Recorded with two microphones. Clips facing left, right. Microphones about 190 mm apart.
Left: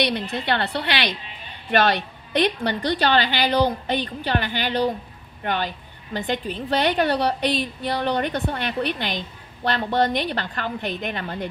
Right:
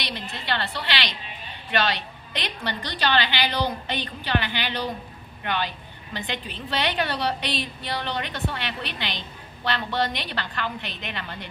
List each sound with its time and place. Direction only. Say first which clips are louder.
0.0 s a woman's voice: left 10 dB; 55° left (ahead or behind)